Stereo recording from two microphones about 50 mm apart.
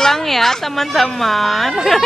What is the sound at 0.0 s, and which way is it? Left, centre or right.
A woman's voice, centre.